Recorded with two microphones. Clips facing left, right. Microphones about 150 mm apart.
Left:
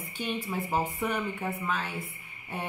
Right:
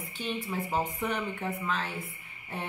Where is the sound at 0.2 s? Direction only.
15° left (ahead or behind).